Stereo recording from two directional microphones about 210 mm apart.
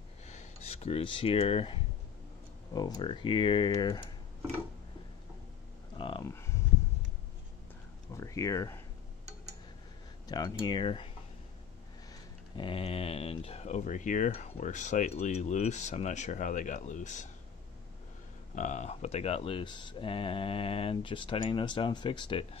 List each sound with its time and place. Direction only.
0.3 s speech: 30° left (ahead or behind)
5.9 s a sound: 25° left (ahead or behind)
6.2 s speech: 10° left (ahead or behind)
8.1 s a sound: 15° left (ahead or behind)
10.2 s speech: 20° left (ahead or behind)
12.1 s speech: 25° left (ahead or behind)
18.5 s speech: 35° left (ahead or behind)